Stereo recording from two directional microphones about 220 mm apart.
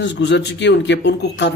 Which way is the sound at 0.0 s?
55° left (ahead or behind).